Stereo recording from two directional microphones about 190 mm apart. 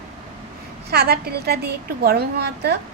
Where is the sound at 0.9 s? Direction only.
55° right (ahead or behind).